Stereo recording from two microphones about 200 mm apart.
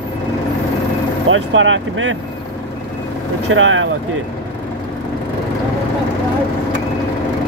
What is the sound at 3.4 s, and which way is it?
Speech, 75° right (ahead or behind).